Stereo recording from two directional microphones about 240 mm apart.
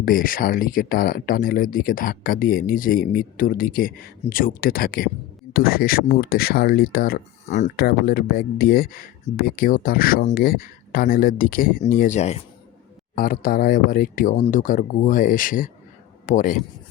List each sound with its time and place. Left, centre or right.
0.0 s a man's voice: left